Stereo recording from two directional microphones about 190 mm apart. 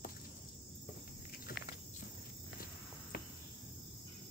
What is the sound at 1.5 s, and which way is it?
Walk, 50° left (ahead or behind).